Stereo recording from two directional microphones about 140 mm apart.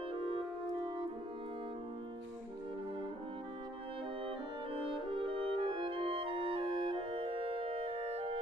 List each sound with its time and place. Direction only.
0.1 s music: 40° right (ahead or behind)
4.8 s french horn: 40° right (ahead or behind)